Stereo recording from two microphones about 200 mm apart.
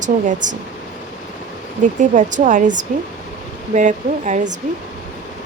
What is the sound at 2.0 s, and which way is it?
Speech, 40° right (ahead or behind).